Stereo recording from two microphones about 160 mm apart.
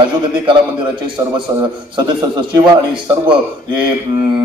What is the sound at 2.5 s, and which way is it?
Speech, 30° right (ahead or behind).